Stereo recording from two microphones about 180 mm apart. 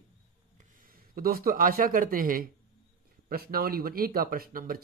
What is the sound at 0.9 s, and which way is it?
Speech, 55° right (ahead or behind).